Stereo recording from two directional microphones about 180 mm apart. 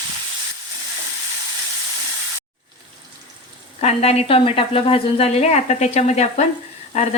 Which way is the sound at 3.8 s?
35° left (ahead or behind).